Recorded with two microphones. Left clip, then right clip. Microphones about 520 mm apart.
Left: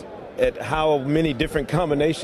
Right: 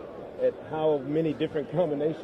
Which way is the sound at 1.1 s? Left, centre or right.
Left.